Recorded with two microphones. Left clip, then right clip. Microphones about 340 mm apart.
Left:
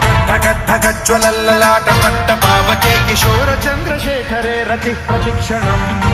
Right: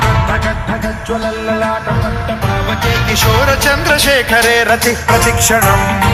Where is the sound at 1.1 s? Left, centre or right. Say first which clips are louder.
Left 5 dB; left.